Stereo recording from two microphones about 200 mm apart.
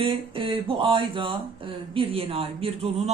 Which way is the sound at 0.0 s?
25° right (ahead or behind).